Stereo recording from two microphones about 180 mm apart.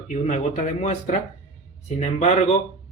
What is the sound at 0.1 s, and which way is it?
Speech, 40° left (ahead or behind).